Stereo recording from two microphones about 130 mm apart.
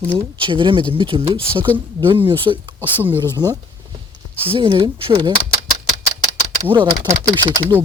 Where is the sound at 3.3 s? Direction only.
25° right (ahead or behind).